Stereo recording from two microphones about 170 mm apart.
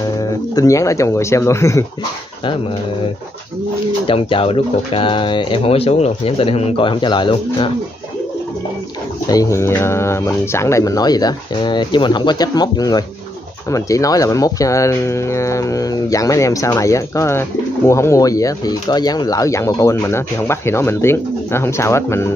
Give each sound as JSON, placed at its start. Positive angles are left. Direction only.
{"t": 0.2, "sound": "speech", "side_deg": 20}
{"t": 4.1, "sound": "speech", "side_deg": 30}
{"t": 9.3, "sound": "speech", "side_deg": 20}